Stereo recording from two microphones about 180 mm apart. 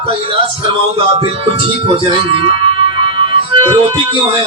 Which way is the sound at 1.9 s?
30° right (ahead or behind).